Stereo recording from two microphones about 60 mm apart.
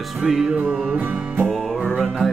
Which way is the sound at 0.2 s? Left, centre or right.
Centre.